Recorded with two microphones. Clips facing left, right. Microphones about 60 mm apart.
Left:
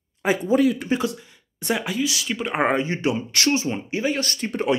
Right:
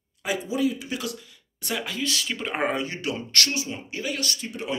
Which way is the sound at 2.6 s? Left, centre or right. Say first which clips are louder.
Left 7 dB; left.